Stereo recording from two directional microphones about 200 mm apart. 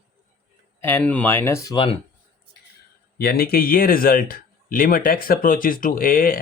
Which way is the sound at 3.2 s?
50° left (ahead or behind).